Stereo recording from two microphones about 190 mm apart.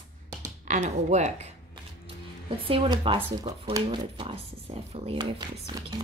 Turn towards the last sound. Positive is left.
turn(degrees=-25)  # may be behind; listen again after turning